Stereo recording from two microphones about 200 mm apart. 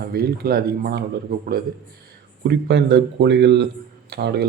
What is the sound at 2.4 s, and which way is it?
A man's voice, 55° right (ahead or behind).